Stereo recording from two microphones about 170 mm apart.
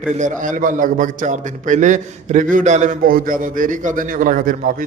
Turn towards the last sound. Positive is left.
turn(degrees=-55)  # may be behind; listen again after turning